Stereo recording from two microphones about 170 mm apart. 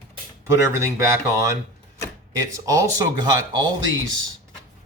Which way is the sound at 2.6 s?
20° right (ahead or behind).